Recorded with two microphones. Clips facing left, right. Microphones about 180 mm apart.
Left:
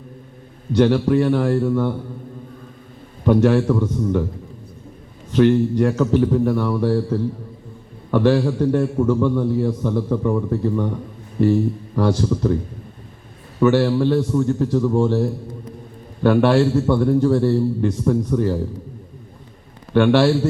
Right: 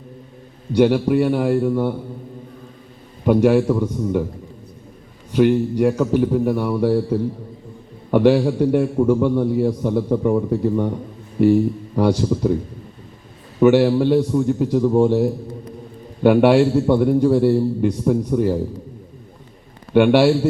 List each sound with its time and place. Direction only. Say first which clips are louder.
0.7 s a man's voice: even; 10° right (ahead or behind)
3.2 s a man's voice: right 1 dB; 10° right (ahead or behind)
5.3 s a man's voice: left 1 dB; 10° right (ahead or behind)
13.6 s a man's voice: right 2 dB; 15° right (ahead or behind)
19.9 s a man's voice: right 2 dB; 15° right (ahead or behind)